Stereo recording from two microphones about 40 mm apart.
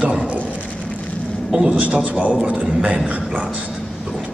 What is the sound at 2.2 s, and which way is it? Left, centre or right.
Speech, right.